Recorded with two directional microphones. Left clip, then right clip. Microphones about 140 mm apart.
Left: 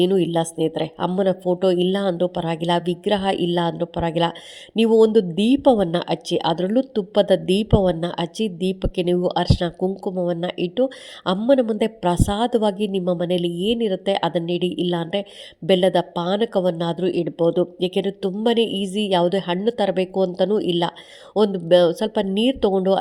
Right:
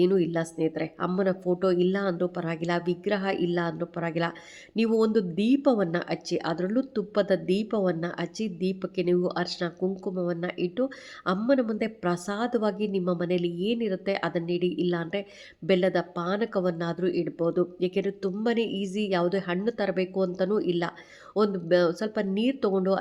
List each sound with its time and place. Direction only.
0.0 s a woman's voice: 40° left (ahead or behind)
9.9 s a woman's voice: 30° left (ahead or behind)